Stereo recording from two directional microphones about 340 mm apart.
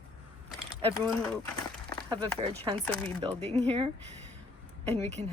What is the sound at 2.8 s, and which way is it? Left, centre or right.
Speech, centre.